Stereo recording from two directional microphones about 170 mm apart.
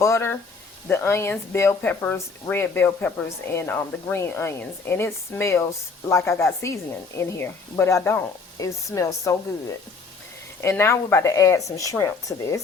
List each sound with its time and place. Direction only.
0.0 s speech: 15° left (ahead or behind)